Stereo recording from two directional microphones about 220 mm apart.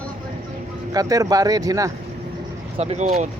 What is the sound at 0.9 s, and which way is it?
Speech, 15° right (ahead or behind).